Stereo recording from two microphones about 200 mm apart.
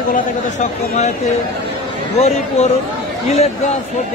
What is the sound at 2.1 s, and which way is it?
Speech, 35° left (ahead or behind).